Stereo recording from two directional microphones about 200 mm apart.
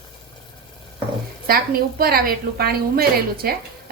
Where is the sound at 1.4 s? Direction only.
50° right (ahead or behind).